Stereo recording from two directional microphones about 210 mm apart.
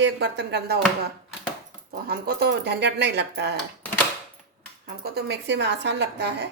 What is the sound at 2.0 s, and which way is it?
A woman's voice, 50° right (ahead or behind).